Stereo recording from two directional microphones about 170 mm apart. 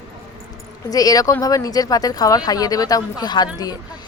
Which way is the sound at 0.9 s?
20° left (ahead or behind).